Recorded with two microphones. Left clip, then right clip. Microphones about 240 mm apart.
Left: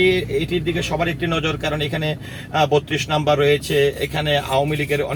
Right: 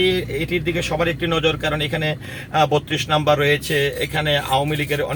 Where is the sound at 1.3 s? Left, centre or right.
Right.